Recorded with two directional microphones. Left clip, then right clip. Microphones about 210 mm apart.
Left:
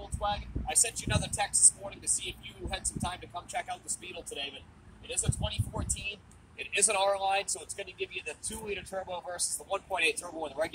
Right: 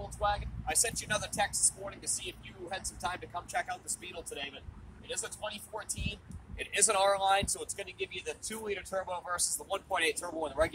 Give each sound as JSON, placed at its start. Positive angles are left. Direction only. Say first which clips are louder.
{"t": 0.2, "sound": "speech", "louder": "right 1 dB", "side_deg": 0}
{"t": 6.6, "sound": "speech", "louder": "even", "side_deg": 15}